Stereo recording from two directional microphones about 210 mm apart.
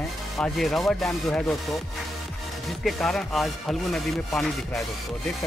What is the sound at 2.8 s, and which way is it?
Speech, centre (ahead or behind).